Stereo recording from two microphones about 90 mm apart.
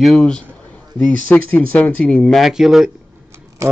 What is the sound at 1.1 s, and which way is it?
Speech, 15° left (ahead or behind).